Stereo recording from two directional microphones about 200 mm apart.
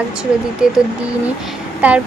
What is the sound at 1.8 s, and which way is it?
Speech, 10° right (ahead or behind).